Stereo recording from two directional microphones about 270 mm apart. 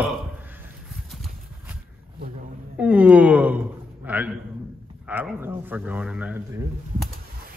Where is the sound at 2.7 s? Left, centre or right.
Centre.